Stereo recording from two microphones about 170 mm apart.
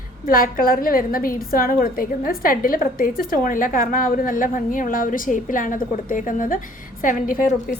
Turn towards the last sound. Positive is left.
turn(degrees=55)  # may be behind; listen again after turning